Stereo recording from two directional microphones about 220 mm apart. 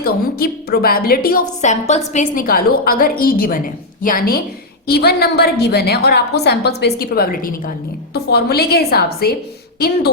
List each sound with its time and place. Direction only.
0.0 s a woman's voice: 45° left (ahead or behind)